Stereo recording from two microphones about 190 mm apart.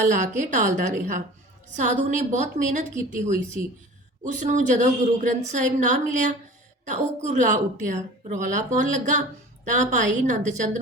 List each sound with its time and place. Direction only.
0.1 s a woman's voice: 40° right (ahead or behind)
4.4 s a woman's voice: 40° right (ahead or behind)